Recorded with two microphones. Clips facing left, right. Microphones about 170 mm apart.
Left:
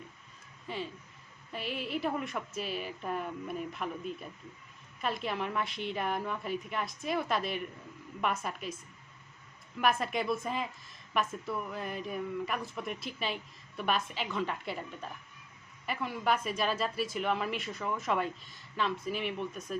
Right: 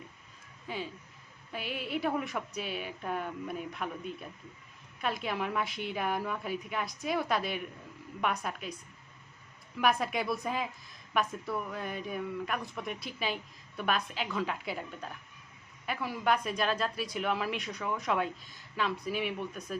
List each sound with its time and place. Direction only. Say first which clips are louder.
0.7 s speech: even; centre (ahead or behind)